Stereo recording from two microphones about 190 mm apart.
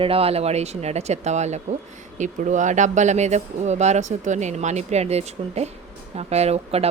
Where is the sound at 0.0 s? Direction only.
30° right (ahead or behind).